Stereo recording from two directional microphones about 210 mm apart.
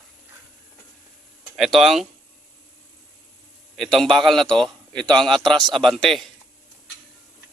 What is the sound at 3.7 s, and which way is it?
A man's voice, centre (ahead or behind).